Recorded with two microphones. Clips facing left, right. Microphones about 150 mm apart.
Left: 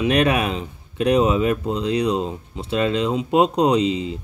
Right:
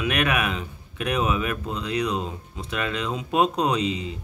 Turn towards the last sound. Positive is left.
turn(degrees=30)  # may be behind; listen again after turning